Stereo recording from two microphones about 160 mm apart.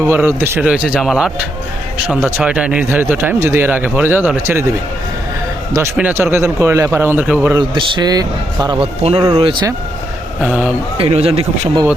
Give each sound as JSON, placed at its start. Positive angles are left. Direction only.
{"t": 0.0, "sound": "a man's voice", "side_deg": -10}
{"t": 5.7, "sound": "a man's voice", "side_deg": -15}
{"t": 7.6, "sound": "a man's voice", "side_deg": -30}
{"t": 10.4, "sound": "a man's voice", "side_deg": -5}
{"t": 10.9, "sound": "a man's voice", "side_deg": -40}